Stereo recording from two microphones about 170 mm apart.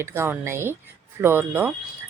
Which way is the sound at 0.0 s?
15° right (ahead or behind).